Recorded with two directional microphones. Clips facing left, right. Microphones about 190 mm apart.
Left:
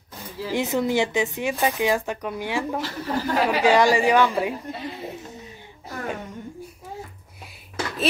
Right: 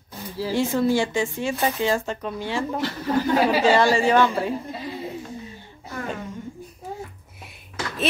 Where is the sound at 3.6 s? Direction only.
15° left (ahead or behind).